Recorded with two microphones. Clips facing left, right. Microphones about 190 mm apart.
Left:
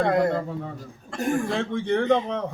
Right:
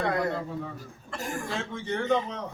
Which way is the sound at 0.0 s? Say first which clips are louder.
Left 6 dB; 50° left (ahead or behind).